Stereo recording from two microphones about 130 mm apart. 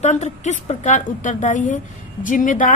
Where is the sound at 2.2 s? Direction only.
90° left.